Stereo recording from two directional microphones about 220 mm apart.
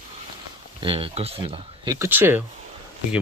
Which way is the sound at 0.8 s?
25° right (ahead or behind).